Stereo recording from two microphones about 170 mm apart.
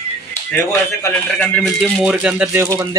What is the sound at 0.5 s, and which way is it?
Speech, 10° left (ahead or behind).